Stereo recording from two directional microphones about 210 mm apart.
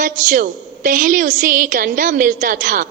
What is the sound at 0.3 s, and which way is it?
A woman's voice, 40° right (ahead or behind).